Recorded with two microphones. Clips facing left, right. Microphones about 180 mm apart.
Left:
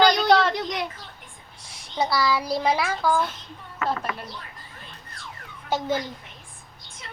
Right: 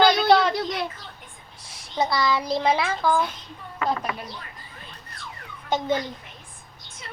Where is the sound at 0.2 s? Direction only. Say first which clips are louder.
Right 1 dB; 10° right (ahead or behind).